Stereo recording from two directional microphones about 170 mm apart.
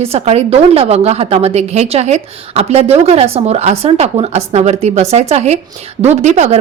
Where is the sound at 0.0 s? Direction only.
35° right (ahead or behind).